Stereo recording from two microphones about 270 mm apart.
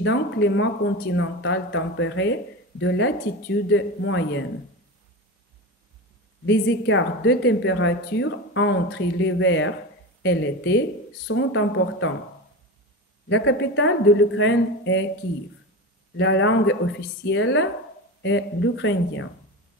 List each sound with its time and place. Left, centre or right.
0.0 s a woman's voice: left
6.4 s a woman's voice: left
13.3 s a woman's voice: left
16.2 s a woman's voice: left